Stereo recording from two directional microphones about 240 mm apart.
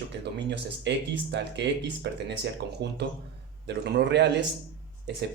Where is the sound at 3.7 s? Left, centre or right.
Right.